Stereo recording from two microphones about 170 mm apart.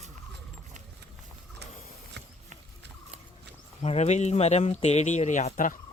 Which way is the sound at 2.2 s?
90° right.